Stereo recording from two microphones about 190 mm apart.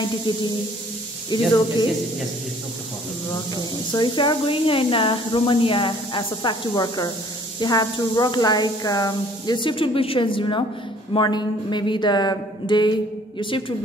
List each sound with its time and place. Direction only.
1.3 s speech: 25° left (ahead or behind)
3.9 s speech: 25° left (ahead or behind)